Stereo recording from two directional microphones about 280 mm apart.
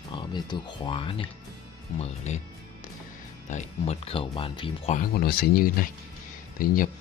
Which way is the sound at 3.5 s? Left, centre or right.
Left.